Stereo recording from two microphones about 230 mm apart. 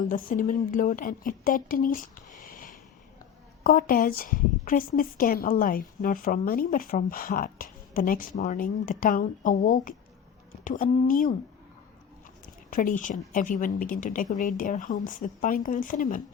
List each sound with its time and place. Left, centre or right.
0.0 s a woman's voice: left
12.7 s a woman's voice: left